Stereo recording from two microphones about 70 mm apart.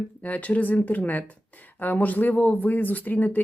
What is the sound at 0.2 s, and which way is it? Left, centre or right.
Speech, left.